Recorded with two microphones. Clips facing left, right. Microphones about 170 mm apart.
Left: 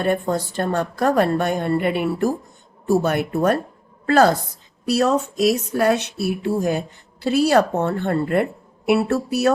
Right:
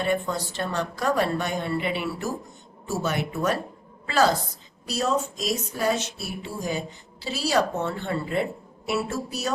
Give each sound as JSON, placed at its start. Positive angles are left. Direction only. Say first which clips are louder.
{"t": 0.0, "sound": "a woman's voice", "louder": "left 5 dB", "side_deg": 50}